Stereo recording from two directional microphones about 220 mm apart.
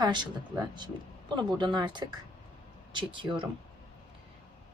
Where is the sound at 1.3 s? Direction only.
20° right (ahead or behind).